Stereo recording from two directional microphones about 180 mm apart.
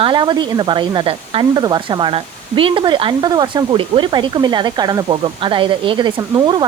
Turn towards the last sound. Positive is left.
turn(degrees=-25)  # may be behind; listen again after turning